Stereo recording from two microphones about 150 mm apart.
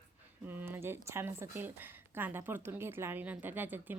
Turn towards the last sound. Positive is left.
turn(degrees=-10)  # may be behind; listen again after turning